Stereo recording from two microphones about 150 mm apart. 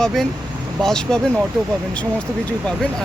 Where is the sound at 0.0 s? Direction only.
Centre (ahead or behind).